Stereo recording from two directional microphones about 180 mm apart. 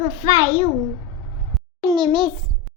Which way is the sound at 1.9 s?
25° right (ahead or behind).